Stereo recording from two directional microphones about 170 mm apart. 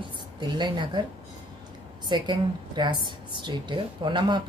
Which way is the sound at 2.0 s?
25° right (ahead or behind).